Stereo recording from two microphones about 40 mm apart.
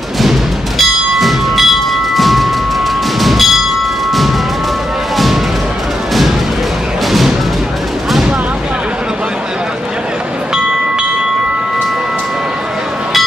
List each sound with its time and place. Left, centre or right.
0.2 s bell: centre
3.2 s train: centre
5.1 s music: centre
7.1 s music: centre
10.5 s train: centre